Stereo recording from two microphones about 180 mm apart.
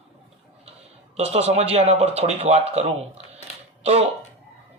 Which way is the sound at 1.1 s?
35° right (ahead or behind).